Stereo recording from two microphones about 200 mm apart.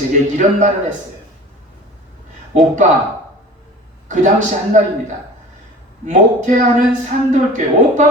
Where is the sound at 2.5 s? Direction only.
40° right (ahead or behind).